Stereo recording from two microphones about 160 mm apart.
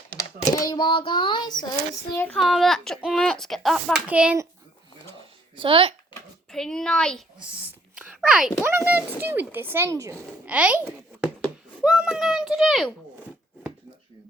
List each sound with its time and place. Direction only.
0.5 s a child's voice: 20° left (ahead or behind)
2.1 s a child's voice: 10° left (ahead or behind); by 4.4 s 10° right (ahead or behind)
5.5 s speech: 35° right (ahead or behind)
6.5 s speech: 5° left (ahead or behind)
7.3 s a sound: 10° right (ahead or behind)
8.6 s a child's voice: 10° right (ahead or behind)